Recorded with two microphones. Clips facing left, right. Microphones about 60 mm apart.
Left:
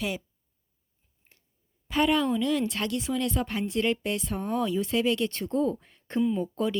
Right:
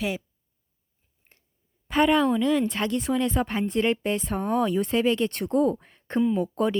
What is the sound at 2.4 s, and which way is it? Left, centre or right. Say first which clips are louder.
Speech: right 4 dB; right.